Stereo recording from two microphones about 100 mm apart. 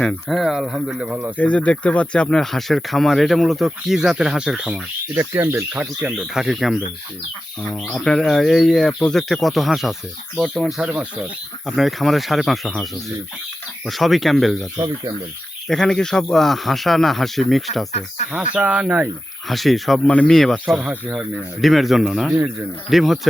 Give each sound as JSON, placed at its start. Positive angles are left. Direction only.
{"t": 0.3, "sound": "speech", "side_deg": 0}
{"t": 1.4, "sound": "speech", "side_deg": 15}
{"t": 5.1, "sound": "speech", "side_deg": -25}
{"t": 5.8, "sound": "speech", "side_deg": -10}
{"t": 7.9, "sound": "speech", "side_deg": 5}
{"t": 14.8, "sound": "speech", "side_deg": -35}
{"t": 15.6, "sound": "speech", "side_deg": 5}
{"t": 18.3, "sound": "speech", "side_deg": -10}
{"t": 19.5, "sound": "speech", "side_deg": 0}
{"t": 20.7, "sound": "speech", "side_deg": -10}